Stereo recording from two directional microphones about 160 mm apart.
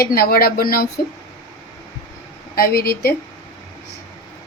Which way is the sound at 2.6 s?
75° left (ahead or behind).